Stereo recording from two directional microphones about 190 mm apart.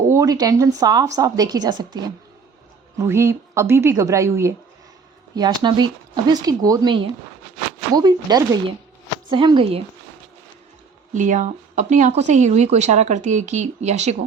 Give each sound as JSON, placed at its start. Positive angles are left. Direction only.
{"t": 0.1, "sound": "speech", "side_deg": -20}
{"t": 3.0, "sound": "a woman's voice", "side_deg": -15}
{"t": 11.1, "sound": "speech", "side_deg": -40}